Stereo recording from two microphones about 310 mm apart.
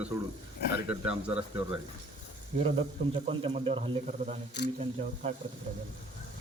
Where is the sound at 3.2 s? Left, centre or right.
Centre.